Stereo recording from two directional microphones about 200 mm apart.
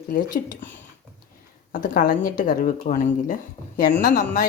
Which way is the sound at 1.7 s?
40° left (ahead or behind).